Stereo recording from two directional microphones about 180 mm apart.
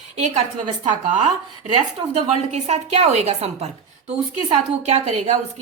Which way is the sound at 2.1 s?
40° right (ahead or behind).